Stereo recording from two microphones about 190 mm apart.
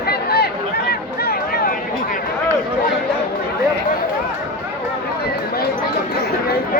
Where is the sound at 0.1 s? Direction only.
55° left (ahead or behind).